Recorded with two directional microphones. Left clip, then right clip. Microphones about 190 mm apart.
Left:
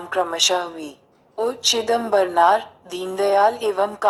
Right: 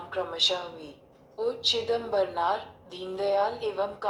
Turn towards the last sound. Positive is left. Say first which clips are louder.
# left 10 dB
turn(degrees=45)  # may be behind; listen again after turning